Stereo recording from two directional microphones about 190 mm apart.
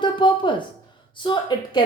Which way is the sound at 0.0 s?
25° left (ahead or behind).